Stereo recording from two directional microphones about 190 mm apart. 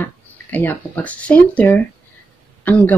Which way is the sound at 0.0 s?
10° left (ahead or behind).